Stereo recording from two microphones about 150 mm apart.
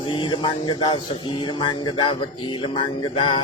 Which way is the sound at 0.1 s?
35° left (ahead or behind).